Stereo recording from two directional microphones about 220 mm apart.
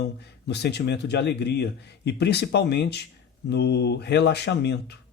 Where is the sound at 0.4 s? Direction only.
50° left (ahead or behind).